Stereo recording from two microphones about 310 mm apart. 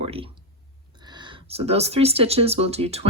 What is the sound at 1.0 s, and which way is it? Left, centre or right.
Speech, centre.